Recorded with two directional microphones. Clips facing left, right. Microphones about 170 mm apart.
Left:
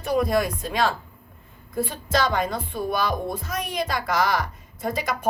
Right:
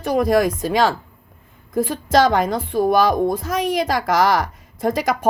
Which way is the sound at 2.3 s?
90° right.